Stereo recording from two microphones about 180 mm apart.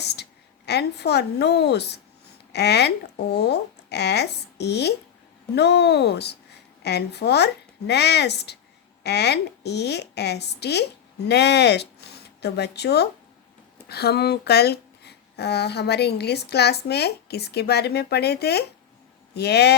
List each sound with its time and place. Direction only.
0.0 s a woman's voice: 65° left (ahead or behind)